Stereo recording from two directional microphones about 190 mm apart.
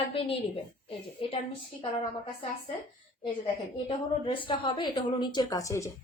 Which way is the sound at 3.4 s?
30° left (ahead or behind).